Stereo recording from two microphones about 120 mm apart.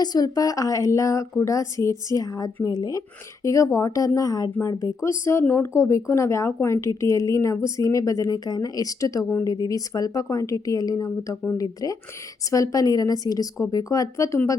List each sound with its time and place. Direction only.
0.0 s a woman's voice: 35° left (ahead or behind)